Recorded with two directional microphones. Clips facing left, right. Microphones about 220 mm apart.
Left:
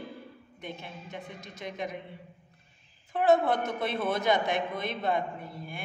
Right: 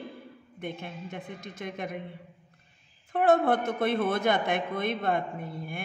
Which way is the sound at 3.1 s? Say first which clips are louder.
Right 1 dB; 55° right (ahead or behind).